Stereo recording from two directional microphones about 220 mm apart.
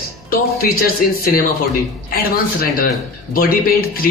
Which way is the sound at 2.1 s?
40° left (ahead or behind).